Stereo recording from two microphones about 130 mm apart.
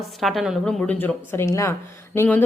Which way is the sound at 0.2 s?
Centre (ahead or behind).